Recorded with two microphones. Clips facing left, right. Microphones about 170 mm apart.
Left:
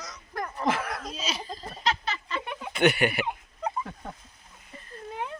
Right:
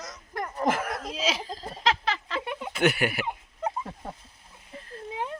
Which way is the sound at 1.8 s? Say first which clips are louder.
Right 3 dB; 90° right.